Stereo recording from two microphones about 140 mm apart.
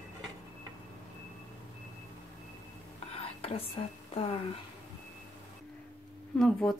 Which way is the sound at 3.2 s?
45° left (ahead or behind).